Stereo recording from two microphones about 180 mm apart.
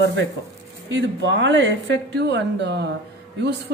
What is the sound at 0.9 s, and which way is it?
Speech, 90° right.